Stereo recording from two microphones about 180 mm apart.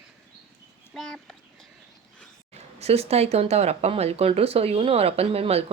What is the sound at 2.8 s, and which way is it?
Speech, 35° right (ahead or behind).